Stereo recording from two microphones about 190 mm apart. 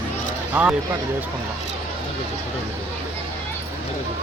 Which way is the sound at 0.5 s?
5° right (ahead or behind).